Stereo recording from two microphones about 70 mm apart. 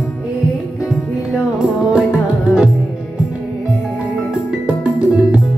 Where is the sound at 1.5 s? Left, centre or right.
Centre.